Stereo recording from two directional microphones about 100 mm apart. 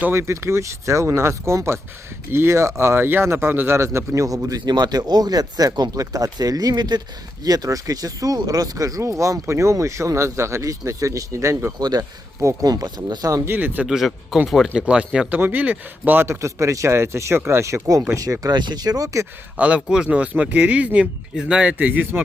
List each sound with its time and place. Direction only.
0.0 s speech: 25° right (ahead or behind)
11.8 s speech: 40° right (ahead or behind)
13.5 s speech: 15° right (ahead or behind)
13.8 s speech: 5° right (ahead or behind); by 17.7 s 25° right (ahead or behind)
18.2 s speech: 40° right (ahead or behind)
19.5 s speech: 10° right (ahead or behind)